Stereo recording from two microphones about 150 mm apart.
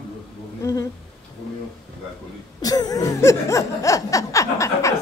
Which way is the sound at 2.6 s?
25° left (ahead or behind).